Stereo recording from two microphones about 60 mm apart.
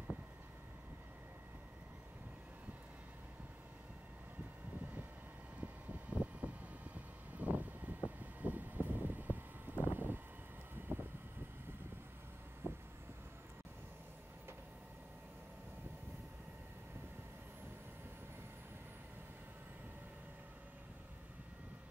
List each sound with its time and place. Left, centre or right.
5.6 s vehicle: right
9.8 s a sound: right
12.6 s vehicle: right